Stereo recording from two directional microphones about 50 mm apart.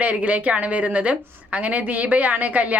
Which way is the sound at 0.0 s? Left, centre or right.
Right.